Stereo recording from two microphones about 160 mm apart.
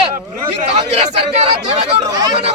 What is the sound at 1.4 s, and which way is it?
Speech, 40° right (ahead or behind).